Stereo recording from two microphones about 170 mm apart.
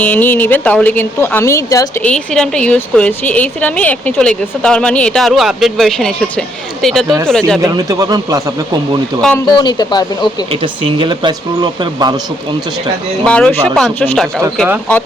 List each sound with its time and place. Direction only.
0.0 s a woman's voice: 10° left (ahead or behind)
2.0 s a woman's voice: 5° left (ahead or behind)
7.6 s speech: 20° right (ahead or behind)
9.6 s speech: 25° left (ahead or behind)
10.5 s speech: 30° right (ahead or behind)
13.2 s a woman's voice: 5° left (ahead or behind)